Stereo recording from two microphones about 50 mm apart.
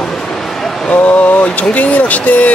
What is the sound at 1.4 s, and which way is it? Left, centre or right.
Speech, left.